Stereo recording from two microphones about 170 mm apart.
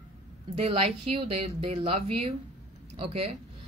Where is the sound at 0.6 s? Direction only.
35° right (ahead or behind).